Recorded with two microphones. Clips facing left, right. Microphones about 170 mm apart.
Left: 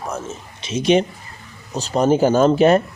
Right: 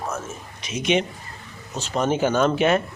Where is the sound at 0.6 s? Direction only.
30° left (ahead or behind).